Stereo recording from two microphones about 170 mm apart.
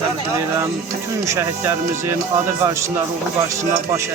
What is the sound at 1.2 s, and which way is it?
Speech, 15° right (ahead or behind).